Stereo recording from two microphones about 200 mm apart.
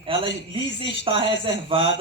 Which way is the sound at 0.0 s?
25° right (ahead or behind).